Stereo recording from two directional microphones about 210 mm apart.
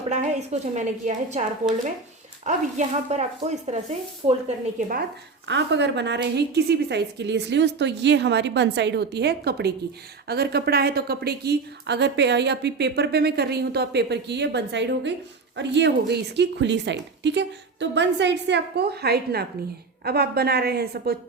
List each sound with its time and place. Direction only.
0.1 s a woman's voice: 35° right (ahead or behind)
5.5 s a woman's voice: 55° right (ahead or behind)